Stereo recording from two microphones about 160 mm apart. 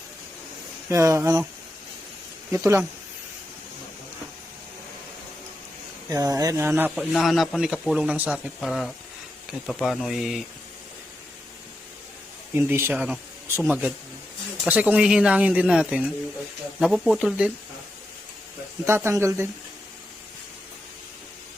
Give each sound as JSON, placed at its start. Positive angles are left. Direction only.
{"t": 0.9, "sound": "speech", "side_deg": -20}
{"t": 2.5, "sound": "speech", "side_deg": -15}
{"t": 6.1, "sound": "speech", "side_deg": -20}
{"t": 6.9, "sound": "speech", "side_deg": 0}
{"t": 12.5, "sound": "speech", "side_deg": -15}
{"t": 18.9, "sound": "speech", "side_deg": -15}